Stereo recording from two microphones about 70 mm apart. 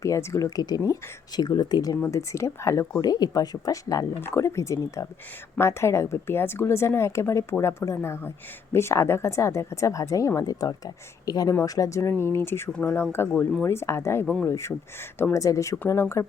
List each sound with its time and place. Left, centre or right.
0.0 s speech: left
1.4 s speech: left
2.0 s a woman's voice: left
3.0 s speech: left
4.2 s a woman's voice: left
12.5 s a woman's voice: left